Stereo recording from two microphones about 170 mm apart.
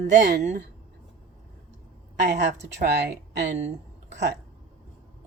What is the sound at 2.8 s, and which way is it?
Speech, 85° right.